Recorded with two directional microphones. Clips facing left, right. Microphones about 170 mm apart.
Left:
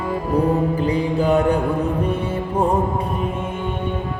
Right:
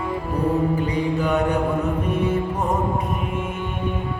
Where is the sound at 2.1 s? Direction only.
30° left (ahead or behind).